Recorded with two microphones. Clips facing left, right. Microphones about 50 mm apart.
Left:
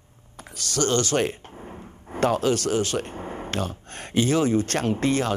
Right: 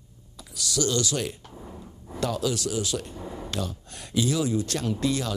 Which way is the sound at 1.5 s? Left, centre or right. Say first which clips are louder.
Left 2 dB; left.